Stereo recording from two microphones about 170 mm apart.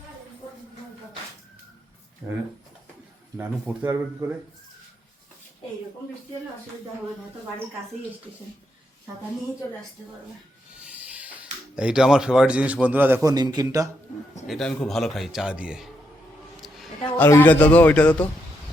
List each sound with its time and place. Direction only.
3.8 s a man's voice: 15° right (ahead or behind)
10.8 s hiss: 10° right (ahead or behind)
11.8 s a man's voice: 5° right (ahead or behind)
13.2 s a man's voice: 25° right (ahead or behind)
14.4 s a man's voice: centre (ahead or behind)